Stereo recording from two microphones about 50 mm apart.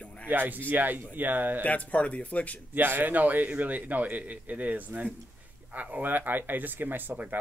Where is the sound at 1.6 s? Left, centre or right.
Left.